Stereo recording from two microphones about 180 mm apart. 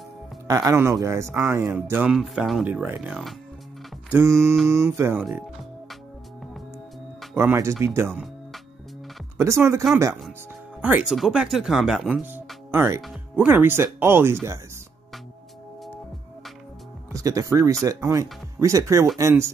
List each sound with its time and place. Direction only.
0.5 s speech: 15° right (ahead or behind)
2.1 s speech: centre (ahead or behind)
4.6 s speech: 15° right (ahead or behind)
5.2 s music: centre (ahead or behind)
7.3 s speech: 15° right (ahead or behind)
9.4 s speech: 15° right (ahead or behind)
13.0 s speech: 5° right (ahead or behind)
17.1 s speech: 20° right (ahead or behind)